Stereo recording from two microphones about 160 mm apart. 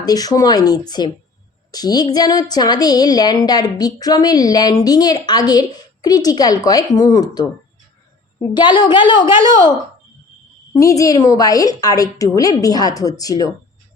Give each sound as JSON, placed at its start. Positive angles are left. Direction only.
{"t": 0.0, "sound": "a woman's voice", "side_deg": 25}
{"t": 10.8, "sound": "a woman's voice", "side_deg": 20}